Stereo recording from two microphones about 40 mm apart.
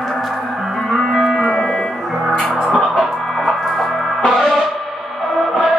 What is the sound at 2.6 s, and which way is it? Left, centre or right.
Music, centre.